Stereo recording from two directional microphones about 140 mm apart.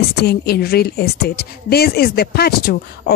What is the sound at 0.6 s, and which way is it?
Speech, 90° left.